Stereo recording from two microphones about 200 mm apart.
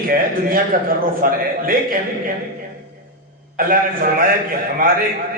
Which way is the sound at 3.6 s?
45° right (ahead or behind).